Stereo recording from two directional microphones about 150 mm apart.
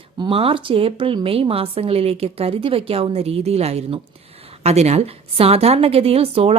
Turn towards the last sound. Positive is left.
turn(degrees=-40)  # may be behind; listen again after turning